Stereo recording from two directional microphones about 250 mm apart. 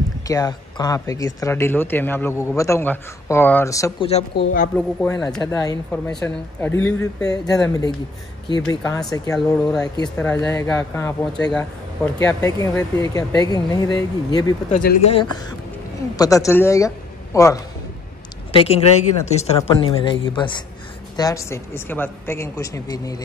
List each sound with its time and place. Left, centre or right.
0.3 s speech: centre
4.3 s speech: left
5.4 s speech: centre
14.7 s a man's voice: left; by 17.6 s centre
18.5 s speech: left